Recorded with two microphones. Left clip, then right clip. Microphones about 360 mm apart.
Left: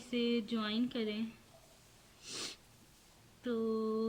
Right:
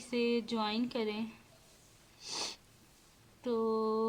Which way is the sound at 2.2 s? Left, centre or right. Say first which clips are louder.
Right 4 dB; centre.